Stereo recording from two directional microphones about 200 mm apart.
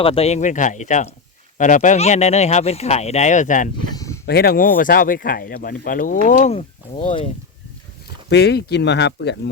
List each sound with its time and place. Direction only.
0.0 s speech: 30° left (ahead or behind)
3.9 s a sound: 15° left (ahead or behind)
4.3 s speech: 50° left (ahead or behind)
7.0 s speech: 25° left (ahead or behind)
8.3 s speech: 55° left (ahead or behind)